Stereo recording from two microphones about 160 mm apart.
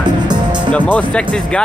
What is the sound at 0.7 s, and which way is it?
Speech, 10° left (ahead or behind).